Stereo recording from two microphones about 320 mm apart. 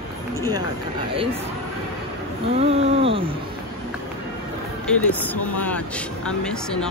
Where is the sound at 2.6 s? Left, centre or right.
Centre.